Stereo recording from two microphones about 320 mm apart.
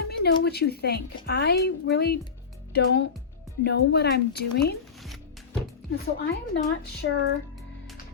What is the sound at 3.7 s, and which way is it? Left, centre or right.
Speech, left.